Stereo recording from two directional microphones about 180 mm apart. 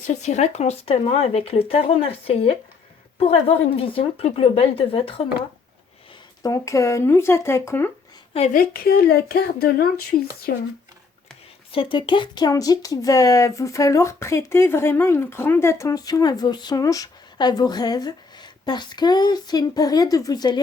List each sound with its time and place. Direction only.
0.2 s speech: 40° left (ahead or behind)
6.4 s speech: 15° left (ahead or behind)
8.5 s speech: 55° left (ahead or behind)
11.7 s speech: 30° left (ahead or behind)